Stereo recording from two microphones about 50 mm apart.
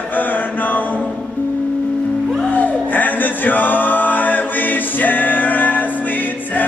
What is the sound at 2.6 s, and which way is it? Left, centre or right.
Singing, left.